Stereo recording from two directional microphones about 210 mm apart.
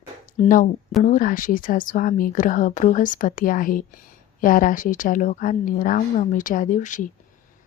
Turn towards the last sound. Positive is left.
turn(degrees=35)  # may be behind; listen again after turning